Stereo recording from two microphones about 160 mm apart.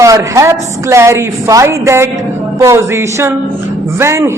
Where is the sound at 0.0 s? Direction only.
20° right (ahead or behind).